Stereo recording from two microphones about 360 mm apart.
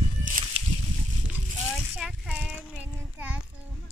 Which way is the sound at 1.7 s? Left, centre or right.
Centre.